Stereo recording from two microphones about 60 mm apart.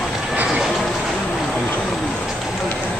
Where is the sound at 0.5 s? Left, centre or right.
Centre.